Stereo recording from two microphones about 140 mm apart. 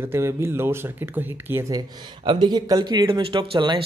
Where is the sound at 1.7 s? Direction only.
30° right (ahead or behind).